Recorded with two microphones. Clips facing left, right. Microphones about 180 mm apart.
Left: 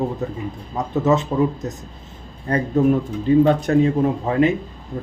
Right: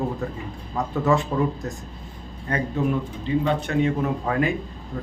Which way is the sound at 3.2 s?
45° left (ahead or behind).